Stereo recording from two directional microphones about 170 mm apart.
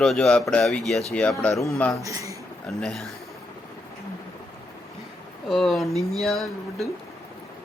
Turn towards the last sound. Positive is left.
turn(degrees=0)  # may be behind; listen again after turning